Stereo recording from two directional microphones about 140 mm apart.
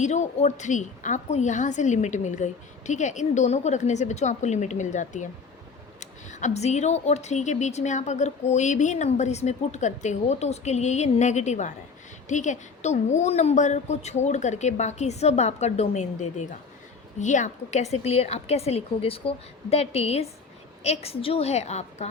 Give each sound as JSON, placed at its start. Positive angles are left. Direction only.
{"t": 0.0, "sound": "a woman's voice", "side_deg": 55}